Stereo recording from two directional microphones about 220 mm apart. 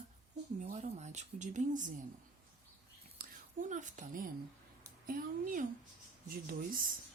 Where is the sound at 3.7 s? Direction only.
35° right (ahead or behind).